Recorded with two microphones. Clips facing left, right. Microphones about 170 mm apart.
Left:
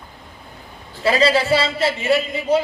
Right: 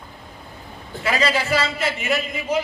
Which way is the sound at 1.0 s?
30° left (ahead or behind).